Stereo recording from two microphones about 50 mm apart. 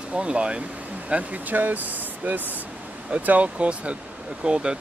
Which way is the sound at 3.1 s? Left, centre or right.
Right.